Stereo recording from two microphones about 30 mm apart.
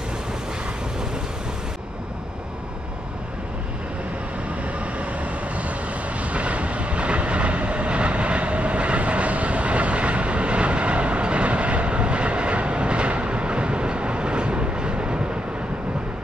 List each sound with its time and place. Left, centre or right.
4.7 s vehicle: right